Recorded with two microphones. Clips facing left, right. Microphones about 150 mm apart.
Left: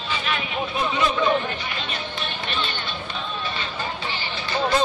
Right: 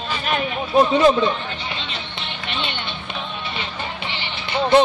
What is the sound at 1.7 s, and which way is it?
Music, 20° right (ahead or behind).